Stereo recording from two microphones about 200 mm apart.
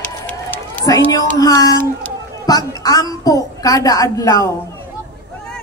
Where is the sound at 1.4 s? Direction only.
20° left (ahead or behind).